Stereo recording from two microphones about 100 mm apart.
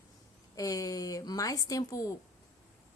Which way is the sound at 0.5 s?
35° left (ahead or behind).